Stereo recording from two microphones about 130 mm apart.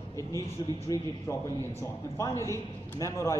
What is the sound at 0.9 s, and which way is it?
Speech, 25° left (ahead or behind).